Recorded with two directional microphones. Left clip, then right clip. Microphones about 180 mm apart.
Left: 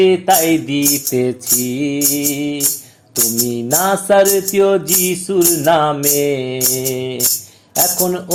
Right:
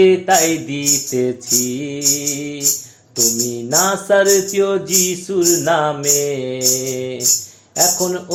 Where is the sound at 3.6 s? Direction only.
35° left (ahead or behind).